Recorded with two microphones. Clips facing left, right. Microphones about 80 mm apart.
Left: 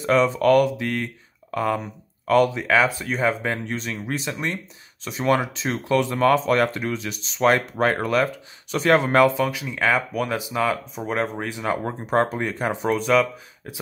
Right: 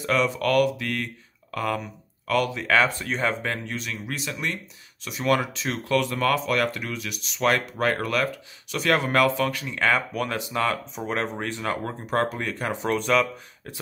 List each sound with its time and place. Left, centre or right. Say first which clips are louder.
0.0 s speech: left 5 dB; left
2.6 s speech: left 2 dB; centre
3.6 s speech: left 4 dB; left
9.5 s speech: left 2 dB; centre
12.8 s speech: left 3 dB; centre